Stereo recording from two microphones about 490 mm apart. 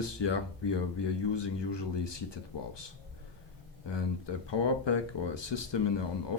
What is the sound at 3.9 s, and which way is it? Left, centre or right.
Speech, left.